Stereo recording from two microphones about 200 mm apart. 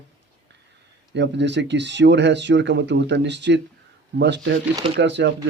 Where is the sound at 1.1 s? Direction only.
60° right (ahead or behind).